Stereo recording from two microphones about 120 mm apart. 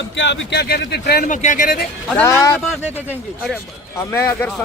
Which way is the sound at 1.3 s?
90° left.